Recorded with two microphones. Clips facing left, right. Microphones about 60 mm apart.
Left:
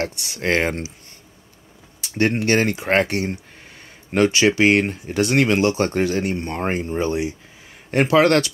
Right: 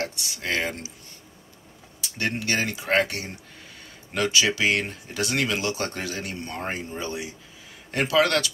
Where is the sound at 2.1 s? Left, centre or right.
Left.